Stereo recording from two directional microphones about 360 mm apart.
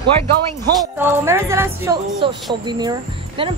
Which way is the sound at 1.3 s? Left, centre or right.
Centre.